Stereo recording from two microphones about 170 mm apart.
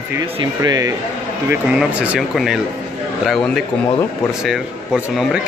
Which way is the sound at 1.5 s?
5° right (ahead or behind).